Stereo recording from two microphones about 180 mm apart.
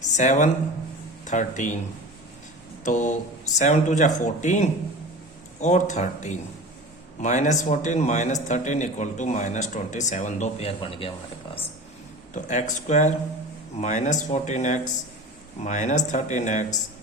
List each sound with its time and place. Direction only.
0.2 s speech: 40° left (ahead or behind)
2.8 s a man's voice: 45° left (ahead or behind)
12.3 s a man's voice: 45° left (ahead or behind)